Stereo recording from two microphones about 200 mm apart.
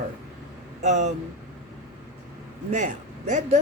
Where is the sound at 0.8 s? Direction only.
35° right (ahead or behind).